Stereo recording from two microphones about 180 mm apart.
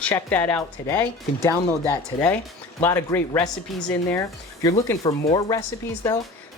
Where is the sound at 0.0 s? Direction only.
10° left (ahead or behind).